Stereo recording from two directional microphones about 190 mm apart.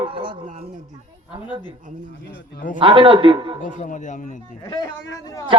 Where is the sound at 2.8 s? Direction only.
30° right (ahead or behind).